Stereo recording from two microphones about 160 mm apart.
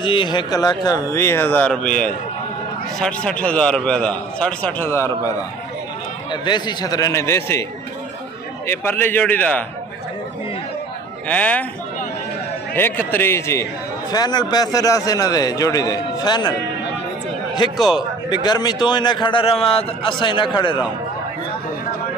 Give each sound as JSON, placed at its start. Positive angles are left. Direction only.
{"t": 0.0, "sound": "a man's voice", "side_deg": 30}
{"t": 6.3, "sound": "a man's voice", "side_deg": 30}
{"t": 8.6, "sound": "a man's voice", "side_deg": 15}
{"t": 11.2, "sound": "a man's voice", "side_deg": 10}
{"t": 12.7, "sound": "a man's voice", "side_deg": 15}
{"t": 17.7, "sound": "a man's voice", "side_deg": 0}
{"t": 18.3, "sound": "a man's voice", "side_deg": 25}